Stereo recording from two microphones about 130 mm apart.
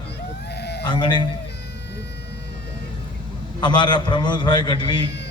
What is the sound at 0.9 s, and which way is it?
Speech, 35° left (ahead or behind).